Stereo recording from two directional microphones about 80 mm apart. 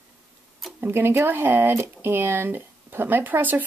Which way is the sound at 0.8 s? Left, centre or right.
Right.